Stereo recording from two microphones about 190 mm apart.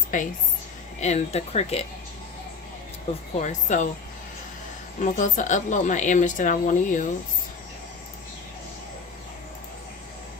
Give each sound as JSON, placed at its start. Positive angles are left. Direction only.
{"t": 0.1, "sound": "speech", "side_deg": 45}
{"t": 3.4, "sound": "speech", "side_deg": 40}
{"t": 4.9, "sound": "speech", "side_deg": 40}